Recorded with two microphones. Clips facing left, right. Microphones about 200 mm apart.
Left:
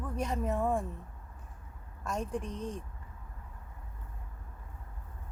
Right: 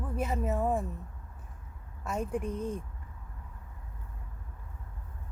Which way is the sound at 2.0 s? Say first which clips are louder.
Right 2 dB; 5° right (ahead or behind).